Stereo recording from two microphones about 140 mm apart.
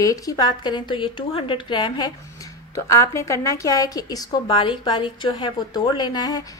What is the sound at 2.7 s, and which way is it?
A woman's voice, 20° left (ahead or behind).